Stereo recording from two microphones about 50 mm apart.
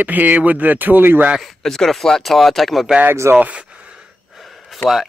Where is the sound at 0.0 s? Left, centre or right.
Right.